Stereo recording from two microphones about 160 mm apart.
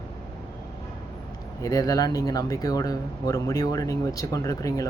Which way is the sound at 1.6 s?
20° left (ahead or behind).